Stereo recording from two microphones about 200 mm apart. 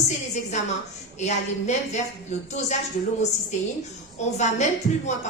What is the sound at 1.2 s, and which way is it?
A woman's voice, 35° left (ahead or behind).